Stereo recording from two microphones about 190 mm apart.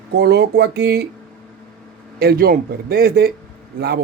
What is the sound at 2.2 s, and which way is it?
Speech, 55° right (ahead or behind).